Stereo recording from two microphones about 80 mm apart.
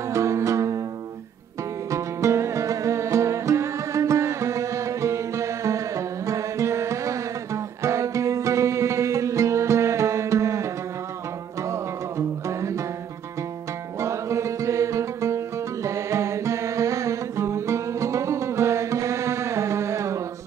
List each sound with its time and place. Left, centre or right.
0.1 s music: right
1.9 s music: right
13.9 s music: right